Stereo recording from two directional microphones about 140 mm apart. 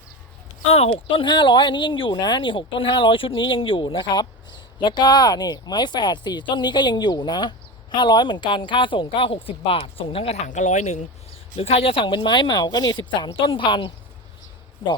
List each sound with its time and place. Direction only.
0.6 s speech: 45° left (ahead or behind)
11.5 s speech: 45° left (ahead or behind)